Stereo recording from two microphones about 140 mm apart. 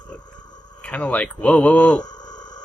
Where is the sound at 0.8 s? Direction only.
10° left (ahead or behind).